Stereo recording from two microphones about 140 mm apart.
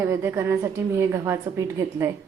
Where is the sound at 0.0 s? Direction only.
20° right (ahead or behind).